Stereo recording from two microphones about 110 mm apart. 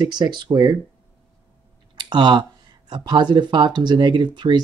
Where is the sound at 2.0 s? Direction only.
40° right (ahead or behind).